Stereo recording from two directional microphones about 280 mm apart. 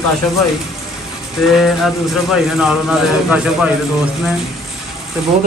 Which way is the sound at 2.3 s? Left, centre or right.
Centre.